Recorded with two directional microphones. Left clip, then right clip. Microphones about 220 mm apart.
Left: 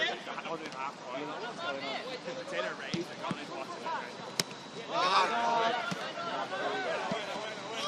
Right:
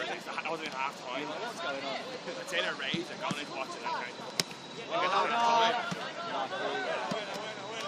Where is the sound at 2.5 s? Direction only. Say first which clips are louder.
Right 4 dB; 35° right (ahead or behind).